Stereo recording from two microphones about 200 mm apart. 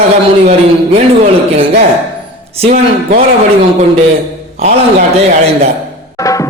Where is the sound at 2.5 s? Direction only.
40° right (ahead or behind).